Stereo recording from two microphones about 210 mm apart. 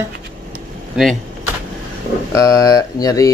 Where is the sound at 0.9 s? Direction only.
Centre (ahead or behind).